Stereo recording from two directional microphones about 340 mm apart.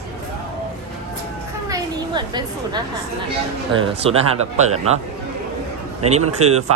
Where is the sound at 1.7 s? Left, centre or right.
Centre.